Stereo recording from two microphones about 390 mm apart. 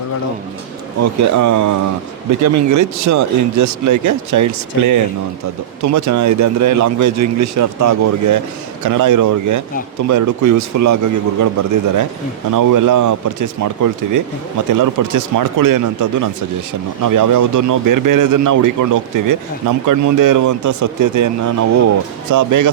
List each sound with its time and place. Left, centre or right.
1.0 s a man's voice: right